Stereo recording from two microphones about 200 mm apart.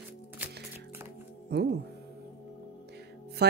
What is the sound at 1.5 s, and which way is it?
Speech, 55° right (ahead or behind).